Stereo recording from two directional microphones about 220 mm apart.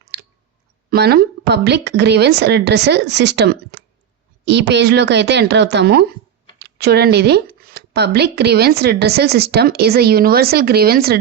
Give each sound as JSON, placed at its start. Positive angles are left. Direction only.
{"t": 0.1, "sound": "clicking", "side_deg": -50}
{"t": 0.9, "sound": "speech", "side_deg": -45}